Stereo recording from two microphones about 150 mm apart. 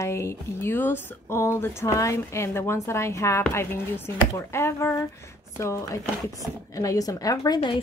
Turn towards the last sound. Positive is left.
turn(degrees=25)  # may be behind; listen again after turning